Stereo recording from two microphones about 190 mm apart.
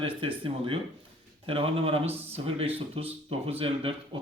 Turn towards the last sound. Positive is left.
turn(degrees=-30)  # may be behind; listen again after turning